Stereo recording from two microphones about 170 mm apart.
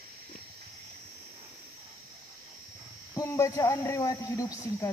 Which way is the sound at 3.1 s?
15° left (ahead or behind).